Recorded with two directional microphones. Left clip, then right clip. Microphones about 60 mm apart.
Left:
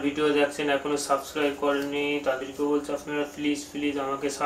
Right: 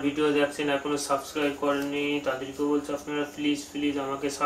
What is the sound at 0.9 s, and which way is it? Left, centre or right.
Mantra, left.